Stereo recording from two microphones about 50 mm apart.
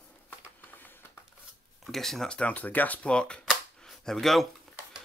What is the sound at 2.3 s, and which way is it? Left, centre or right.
Speech, left.